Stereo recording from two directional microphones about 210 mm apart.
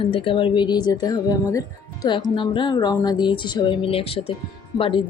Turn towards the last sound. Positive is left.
turn(degrees=25)  # may be behind; listen again after turning